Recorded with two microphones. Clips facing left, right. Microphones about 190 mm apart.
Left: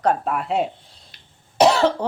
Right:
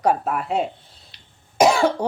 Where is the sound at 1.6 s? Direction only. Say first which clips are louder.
Left 1 dB; 10° right (ahead or behind).